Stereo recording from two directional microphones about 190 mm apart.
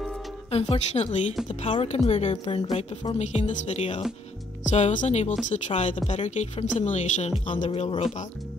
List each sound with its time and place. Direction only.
0.5 s speech: 30° left (ahead or behind)